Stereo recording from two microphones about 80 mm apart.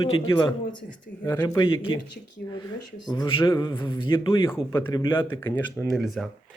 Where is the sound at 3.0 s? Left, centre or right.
Left.